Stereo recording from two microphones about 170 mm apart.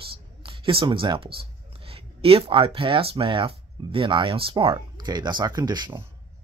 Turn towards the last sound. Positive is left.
turn(degrees=-25)  # may be behind; listen again after turning